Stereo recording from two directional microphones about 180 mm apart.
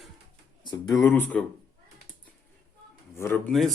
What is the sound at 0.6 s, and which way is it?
Speech, 20° left (ahead or behind).